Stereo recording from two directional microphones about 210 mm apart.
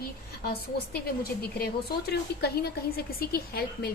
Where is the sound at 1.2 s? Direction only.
45° left (ahead or behind).